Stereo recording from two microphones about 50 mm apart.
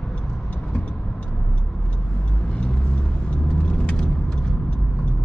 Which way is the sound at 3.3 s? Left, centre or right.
Left.